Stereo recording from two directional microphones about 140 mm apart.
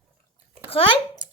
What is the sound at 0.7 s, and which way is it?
Speech, 40° left (ahead or behind).